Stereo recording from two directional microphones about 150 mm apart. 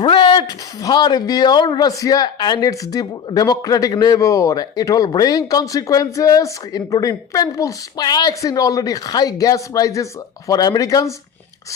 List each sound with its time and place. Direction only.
0.0 s speech: 35° left (ahead or behind)